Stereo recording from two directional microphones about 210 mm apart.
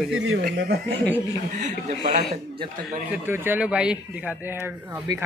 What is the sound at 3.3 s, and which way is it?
Speech, 10° right (ahead or behind).